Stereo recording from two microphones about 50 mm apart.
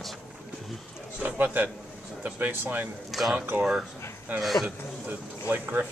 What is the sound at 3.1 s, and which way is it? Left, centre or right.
Speech, centre.